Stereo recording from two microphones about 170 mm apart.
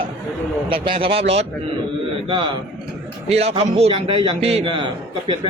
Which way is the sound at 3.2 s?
35° right (ahead or behind).